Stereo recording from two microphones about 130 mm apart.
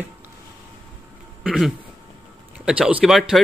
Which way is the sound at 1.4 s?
Centre (ahead or behind).